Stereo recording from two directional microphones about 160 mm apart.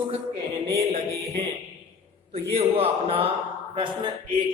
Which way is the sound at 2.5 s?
35° right (ahead or behind).